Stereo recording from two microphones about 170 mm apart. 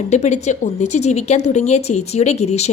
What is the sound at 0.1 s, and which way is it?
Speech, 40° left (ahead or behind).